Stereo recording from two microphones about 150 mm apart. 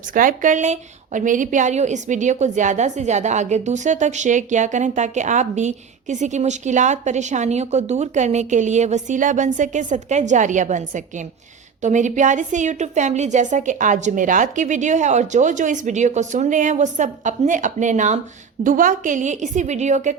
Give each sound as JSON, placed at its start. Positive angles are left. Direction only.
{"t": 0.1, "sound": "a woman's voice", "side_deg": -60}